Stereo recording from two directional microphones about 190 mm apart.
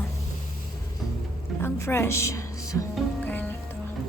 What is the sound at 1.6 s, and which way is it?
Speech, 15° left (ahead or behind).